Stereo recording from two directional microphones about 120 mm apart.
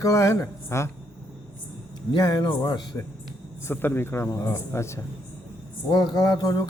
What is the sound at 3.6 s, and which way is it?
A man's voice, 20° left (ahead or behind).